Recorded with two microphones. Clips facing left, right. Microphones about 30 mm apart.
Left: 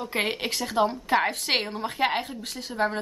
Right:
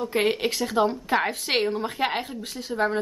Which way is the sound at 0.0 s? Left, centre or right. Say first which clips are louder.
Right 4 dB; centre.